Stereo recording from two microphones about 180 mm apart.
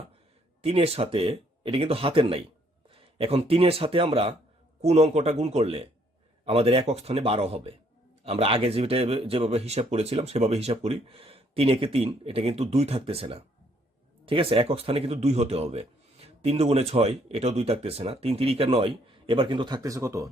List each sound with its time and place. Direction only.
0.6 s a man's voice: 35° right (ahead or behind); by 20.3 s 15° right (ahead or behind)